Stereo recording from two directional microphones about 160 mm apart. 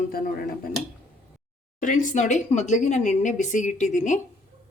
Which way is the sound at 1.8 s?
50° left (ahead or behind).